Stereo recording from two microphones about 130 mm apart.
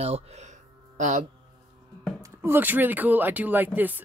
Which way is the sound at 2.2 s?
20° right (ahead or behind).